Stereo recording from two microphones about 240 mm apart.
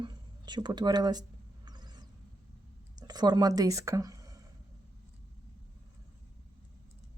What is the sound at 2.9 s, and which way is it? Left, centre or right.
Speech, centre.